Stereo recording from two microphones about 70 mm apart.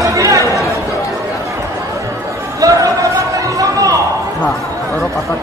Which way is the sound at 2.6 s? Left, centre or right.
Right.